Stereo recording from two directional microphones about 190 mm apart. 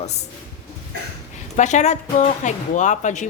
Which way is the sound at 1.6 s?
40° left (ahead or behind).